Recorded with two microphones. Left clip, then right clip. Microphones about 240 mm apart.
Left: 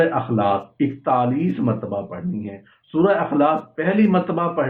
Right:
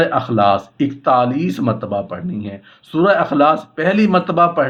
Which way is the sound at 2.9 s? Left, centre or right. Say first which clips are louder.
Right 4 dB; right.